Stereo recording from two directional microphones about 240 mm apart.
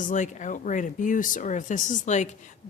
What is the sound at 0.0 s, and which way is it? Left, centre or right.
Speech, left.